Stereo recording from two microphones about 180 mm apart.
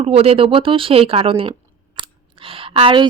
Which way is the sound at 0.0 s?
35° right (ahead or behind).